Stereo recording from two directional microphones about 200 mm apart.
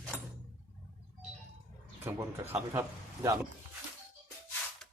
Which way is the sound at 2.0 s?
10° right (ahead or behind).